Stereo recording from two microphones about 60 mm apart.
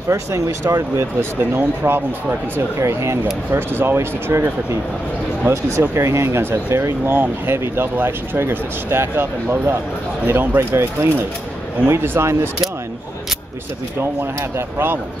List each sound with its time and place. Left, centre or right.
0.1 s speech: right
1.4 s speech: right
2.8 s speech: right
3.5 s speech: right
10.2 s speech: right